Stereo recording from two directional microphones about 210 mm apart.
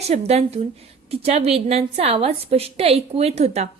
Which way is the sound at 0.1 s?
30° right (ahead or behind).